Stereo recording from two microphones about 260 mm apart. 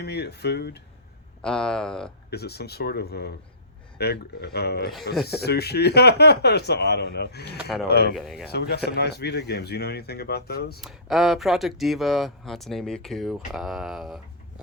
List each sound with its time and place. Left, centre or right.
0.0 s speech: left
1.4 s speech: centre
2.3 s speech: left
8.1 s speech: centre
8.4 s speech: left
10.8 s speech: centre